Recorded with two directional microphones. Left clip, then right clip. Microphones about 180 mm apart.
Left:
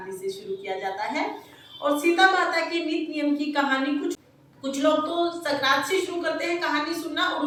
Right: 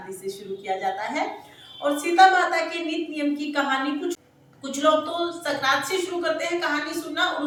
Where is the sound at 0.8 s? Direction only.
5° right (ahead or behind).